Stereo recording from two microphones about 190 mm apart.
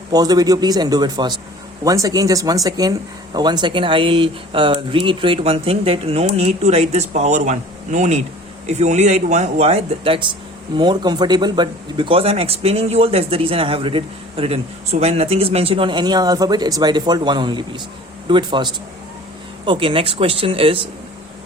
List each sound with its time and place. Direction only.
0.1 s speech: 20° right (ahead or behind)